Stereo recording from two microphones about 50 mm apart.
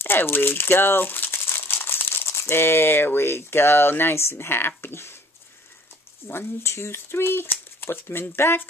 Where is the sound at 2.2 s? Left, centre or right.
Left.